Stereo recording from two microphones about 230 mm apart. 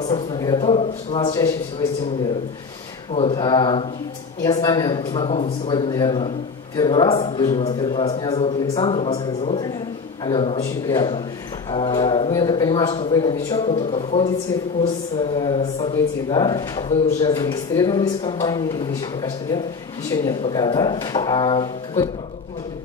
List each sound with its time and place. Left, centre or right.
0.0 s a man's voice: left
3.2 s a man's voice: left
15.4 s a man's voice: left